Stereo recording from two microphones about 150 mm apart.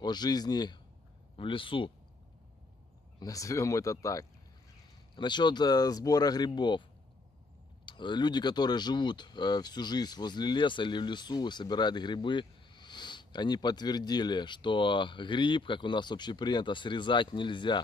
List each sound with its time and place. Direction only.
0.0 s speech: 30° left (ahead or behind)
3.2 s speech: 25° left (ahead or behind)
7.8 s speech: 30° left (ahead or behind)